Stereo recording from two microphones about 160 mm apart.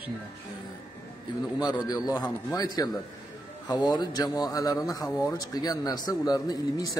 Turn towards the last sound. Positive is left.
turn(degrees=25)  # may be behind; listen again after turning